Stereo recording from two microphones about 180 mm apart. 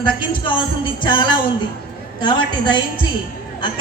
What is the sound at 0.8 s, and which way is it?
A woman's voice, 25° left (ahead or behind).